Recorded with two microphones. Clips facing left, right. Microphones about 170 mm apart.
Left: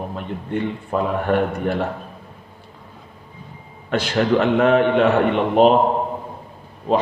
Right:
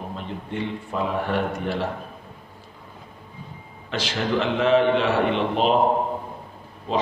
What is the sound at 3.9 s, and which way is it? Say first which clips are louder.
Speech: left 6 dB; 55° left (ahead or behind).